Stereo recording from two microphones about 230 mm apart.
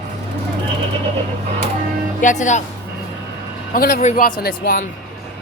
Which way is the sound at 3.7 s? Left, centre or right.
Left.